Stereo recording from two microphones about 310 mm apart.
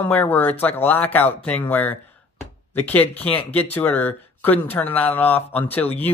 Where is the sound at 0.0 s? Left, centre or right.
Centre.